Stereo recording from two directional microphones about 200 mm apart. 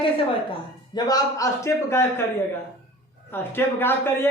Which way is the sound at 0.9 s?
20° left (ahead or behind).